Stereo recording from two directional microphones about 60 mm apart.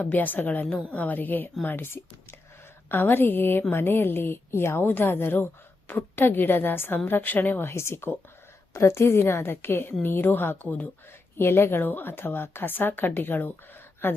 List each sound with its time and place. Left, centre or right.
0.0 s a woman's voice: left
7.6 s a woman's voice: left